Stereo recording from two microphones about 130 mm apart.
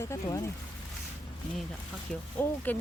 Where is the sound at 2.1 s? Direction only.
15° left (ahead or behind).